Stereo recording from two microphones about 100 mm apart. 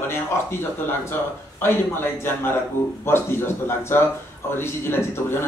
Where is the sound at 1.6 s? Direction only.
20° left (ahead or behind).